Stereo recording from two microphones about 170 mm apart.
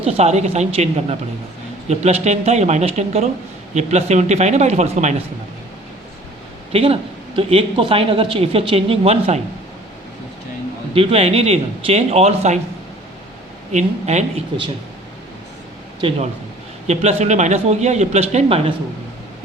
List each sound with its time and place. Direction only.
0.0 s speech: 40° right (ahead or behind)
6.7 s speech: 35° right (ahead or behind)
10.9 s speech: 35° right (ahead or behind)
13.7 s speech: 45° right (ahead or behind)
16.0 s speech: 35° right (ahead or behind)